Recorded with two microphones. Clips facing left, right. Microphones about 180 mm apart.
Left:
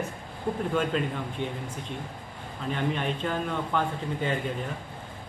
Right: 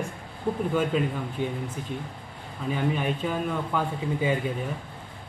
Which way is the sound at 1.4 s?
10° right (ahead or behind).